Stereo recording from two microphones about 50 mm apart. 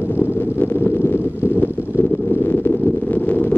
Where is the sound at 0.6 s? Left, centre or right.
Left.